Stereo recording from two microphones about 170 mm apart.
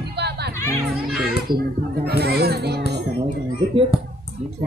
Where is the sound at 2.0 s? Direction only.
70° right (ahead or behind).